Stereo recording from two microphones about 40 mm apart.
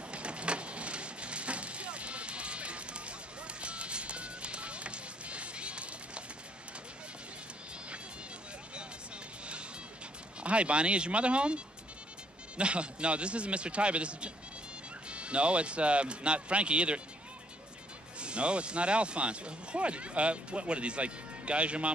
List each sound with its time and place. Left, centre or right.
0.1 s vehicle: right
3.6 s music: right
10.4 s speech: right
18.2 s speech: right